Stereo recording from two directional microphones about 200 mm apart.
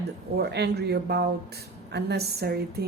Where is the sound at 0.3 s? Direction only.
55° right (ahead or behind).